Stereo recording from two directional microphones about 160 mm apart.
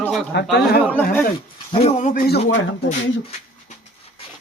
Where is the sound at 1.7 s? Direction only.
40° left (ahead or behind).